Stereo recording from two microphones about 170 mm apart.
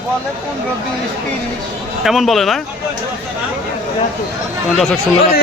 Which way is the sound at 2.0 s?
Centre (ahead or behind).